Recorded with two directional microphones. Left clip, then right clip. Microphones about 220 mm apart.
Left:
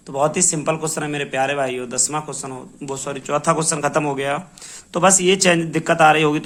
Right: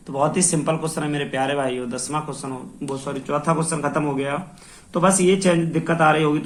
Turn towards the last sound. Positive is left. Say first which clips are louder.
# left 4 dB
turn(degrees=45)  # may be behind; listen again after turning